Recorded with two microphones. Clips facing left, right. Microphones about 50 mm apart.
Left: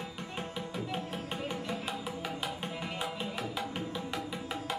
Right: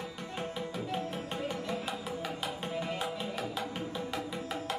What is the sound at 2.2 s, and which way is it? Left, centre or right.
Music, left.